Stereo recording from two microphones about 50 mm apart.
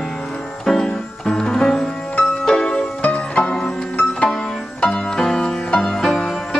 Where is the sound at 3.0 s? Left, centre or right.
Left.